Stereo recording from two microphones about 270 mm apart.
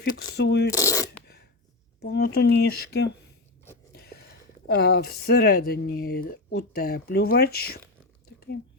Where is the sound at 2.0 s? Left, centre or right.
Left.